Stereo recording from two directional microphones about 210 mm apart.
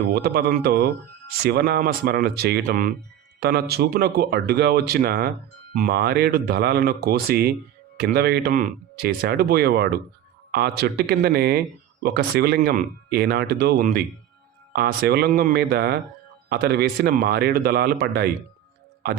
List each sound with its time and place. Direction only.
0.1 s speech: 50° right (ahead or behind)